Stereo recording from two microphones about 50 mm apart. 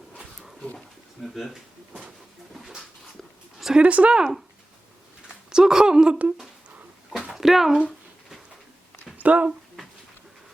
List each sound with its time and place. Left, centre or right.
1.2 s speech: centre
1.9 s a sound: right
2.6 s dog: centre
3.8 s speech: right
4.2 s speech: centre
5.5 s speech: centre
7.3 s a sound: centre
9.1 s speech: right